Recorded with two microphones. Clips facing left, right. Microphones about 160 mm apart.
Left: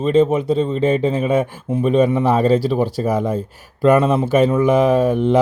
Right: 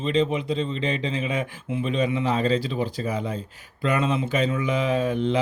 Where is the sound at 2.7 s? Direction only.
80° left.